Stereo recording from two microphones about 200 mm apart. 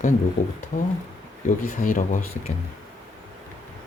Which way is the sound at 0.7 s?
40° left (ahead or behind).